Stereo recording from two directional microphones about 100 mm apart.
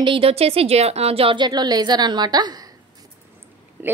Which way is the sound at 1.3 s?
45° right (ahead or behind).